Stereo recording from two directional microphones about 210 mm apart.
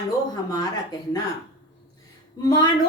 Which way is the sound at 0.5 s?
20° left (ahead or behind).